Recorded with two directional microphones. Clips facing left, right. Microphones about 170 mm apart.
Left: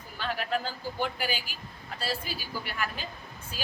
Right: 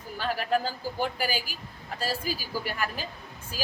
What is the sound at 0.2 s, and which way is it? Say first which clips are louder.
A woman's voice: right 4 dB; 40° right (ahead or behind).